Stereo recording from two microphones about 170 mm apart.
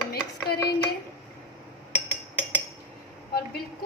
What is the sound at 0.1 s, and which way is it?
Chopping, 70° left (ahead or behind).